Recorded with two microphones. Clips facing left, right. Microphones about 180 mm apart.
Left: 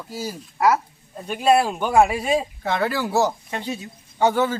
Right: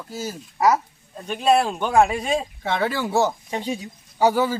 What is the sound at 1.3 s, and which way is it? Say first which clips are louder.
Speech: left 1 dB; 5° left (ahead or behind).